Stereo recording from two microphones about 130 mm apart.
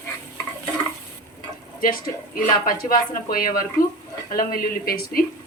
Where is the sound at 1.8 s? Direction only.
90° left.